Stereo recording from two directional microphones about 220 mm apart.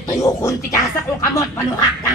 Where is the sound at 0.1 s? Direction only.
15° left (ahead or behind).